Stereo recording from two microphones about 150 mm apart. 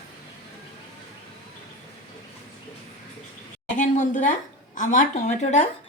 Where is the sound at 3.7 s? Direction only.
55° left (ahead or behind).